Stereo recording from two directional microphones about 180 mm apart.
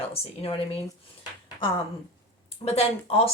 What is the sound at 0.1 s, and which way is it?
Speech, 30° left (ahead or behind).